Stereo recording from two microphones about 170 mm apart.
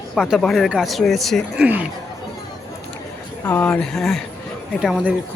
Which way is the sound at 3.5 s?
10° left (ahead or behind).